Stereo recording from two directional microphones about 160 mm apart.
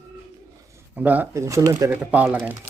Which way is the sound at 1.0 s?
10° right (ahead or behind).